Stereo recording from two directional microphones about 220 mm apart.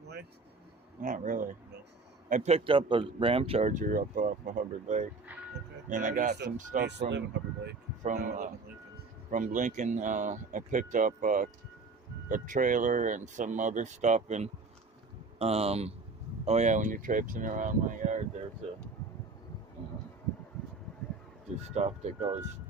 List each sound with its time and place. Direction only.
1.0 s speech: 35° right (ahead or behind)
5.3 s music: 5° right (ahead or behind)
5.9 s speech: 35° right (ahead or behind)
6.8 s speech: 50° right (ahead or behind)
8.0 s speech: 35° right (ahead or behind)
21.8 s speech: 30° right (ahead or behind)